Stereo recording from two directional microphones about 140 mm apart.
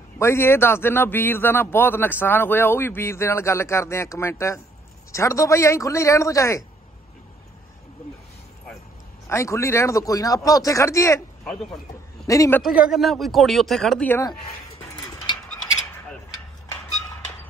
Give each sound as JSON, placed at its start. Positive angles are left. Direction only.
{"t": 0.2, "sound": "a man's voice", "side_deg": 20}
{"t": 9.3, "sound": "speech", "side_deg": 20}
{"t": 12.3, "sound": "speech", "side_deg": 25}
{"t": 12.6, "sound": "speech", "side_deg": -5}